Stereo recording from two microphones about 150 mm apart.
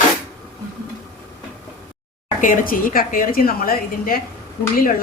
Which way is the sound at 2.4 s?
65° left (ahead or behind).